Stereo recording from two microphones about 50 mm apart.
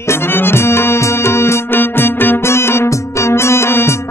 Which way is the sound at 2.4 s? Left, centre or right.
Left.